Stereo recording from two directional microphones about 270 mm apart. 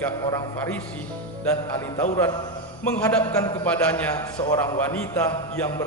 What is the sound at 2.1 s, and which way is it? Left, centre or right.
A man's voice, centre.